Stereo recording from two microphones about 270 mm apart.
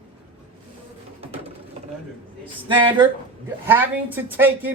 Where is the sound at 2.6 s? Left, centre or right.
Centre.